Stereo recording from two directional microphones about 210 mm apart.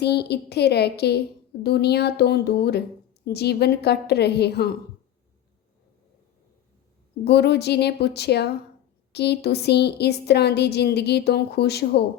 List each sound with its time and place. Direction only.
0.0 s speech: 50° left (ahead or behind)
7.3 s speech: 50° left (ahead or behind)